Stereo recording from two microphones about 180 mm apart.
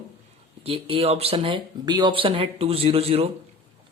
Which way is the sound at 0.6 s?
30° right (ahead or behind).